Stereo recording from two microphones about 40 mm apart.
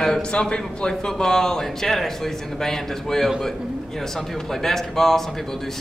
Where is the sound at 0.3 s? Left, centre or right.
Left.